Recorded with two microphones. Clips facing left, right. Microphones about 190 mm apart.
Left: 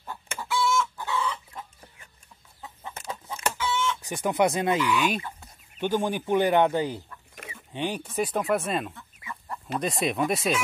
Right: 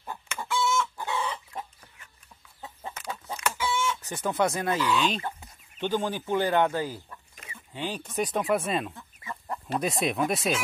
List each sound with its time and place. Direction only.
0.5 s chicken: centre (ahead or behind)
0.9 s chicken: 20° right (ahead or behind)
3.5 s chicken: 10° right (ahead or behind)
4.0 s speech: 15° left (ahead or behind)
8.9 s chicken: 30° right (ahead or behind)
9.8 s speech: centre (ahead or behind)